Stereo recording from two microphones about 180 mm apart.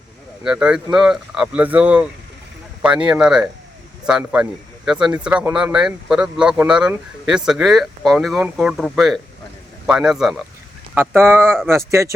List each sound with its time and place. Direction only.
0.4 s speech: 5° right (ahead or behind)
10.9 s speech: 10° right (ahead or behind)